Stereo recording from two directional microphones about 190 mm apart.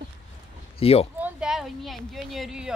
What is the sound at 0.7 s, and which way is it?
Speech, 30° left (ahead or behind).